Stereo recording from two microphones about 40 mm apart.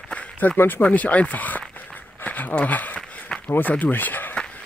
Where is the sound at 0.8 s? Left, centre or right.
Left.